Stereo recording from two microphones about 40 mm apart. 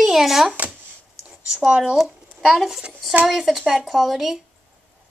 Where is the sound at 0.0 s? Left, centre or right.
Centre.